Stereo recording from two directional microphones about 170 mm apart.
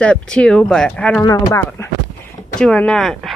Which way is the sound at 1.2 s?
20° left (ahead or behind).